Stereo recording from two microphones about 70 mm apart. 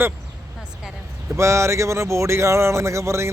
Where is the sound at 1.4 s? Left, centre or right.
Right.